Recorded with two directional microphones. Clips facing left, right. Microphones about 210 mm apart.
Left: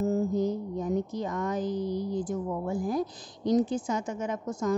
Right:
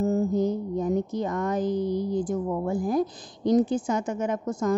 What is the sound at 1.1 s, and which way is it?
A woman's voice, 55° right (ahead or behind).